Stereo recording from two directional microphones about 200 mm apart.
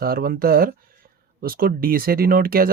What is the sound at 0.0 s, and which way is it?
Speech, 50° right (ahead or behind).